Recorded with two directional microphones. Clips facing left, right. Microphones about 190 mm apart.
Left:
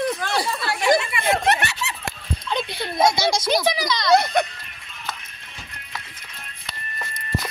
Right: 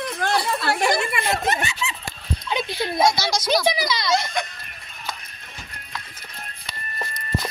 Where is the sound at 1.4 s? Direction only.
70° left (ahead or behind).